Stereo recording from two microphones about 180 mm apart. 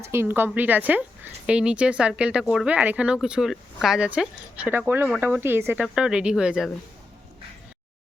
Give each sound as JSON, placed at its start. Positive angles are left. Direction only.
{"t": 0.0, "sound": "a woman's voice", "side_deg": -15}